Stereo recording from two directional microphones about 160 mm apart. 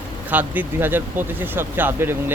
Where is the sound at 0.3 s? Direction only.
10° right (ahead or behind).